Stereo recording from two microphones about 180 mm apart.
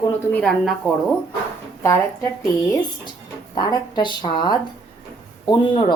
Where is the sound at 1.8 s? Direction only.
15° left (ahead or behind).